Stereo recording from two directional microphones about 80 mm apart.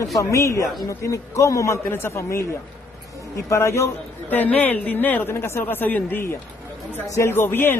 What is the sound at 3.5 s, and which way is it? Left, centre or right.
Speech, left.